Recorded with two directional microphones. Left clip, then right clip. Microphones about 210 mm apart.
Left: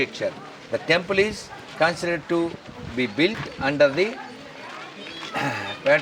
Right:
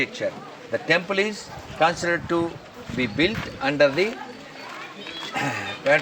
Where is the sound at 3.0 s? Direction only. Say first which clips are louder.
Even; 10° left (ahead or behind).